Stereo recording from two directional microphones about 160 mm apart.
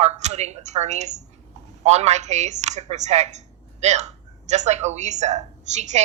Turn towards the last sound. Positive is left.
turn(degrees=-45)  # may be behind; listen again after turning